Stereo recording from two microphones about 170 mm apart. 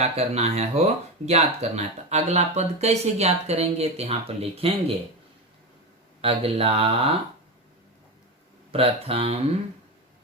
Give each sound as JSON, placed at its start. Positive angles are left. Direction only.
{"t": 0.0, "sound": "speech", "side_deg": -40}
{"t": 6.2, "sound": "speech", "side_deg": -35}
{"t": 8.7, "sound": "speech", "side_deg": -35}